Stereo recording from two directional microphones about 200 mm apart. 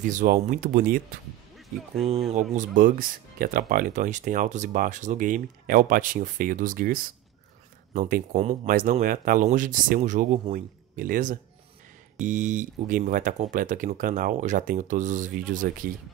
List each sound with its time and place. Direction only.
0.0 s speech: 40° right (ahead or behind)
2.5 s speech: 40° right (ahead or behind)